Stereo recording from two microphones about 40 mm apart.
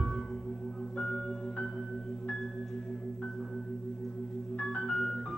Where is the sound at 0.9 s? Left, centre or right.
Centre.